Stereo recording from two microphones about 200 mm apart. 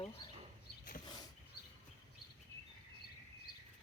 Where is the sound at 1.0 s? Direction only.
20° left (ahead or behind).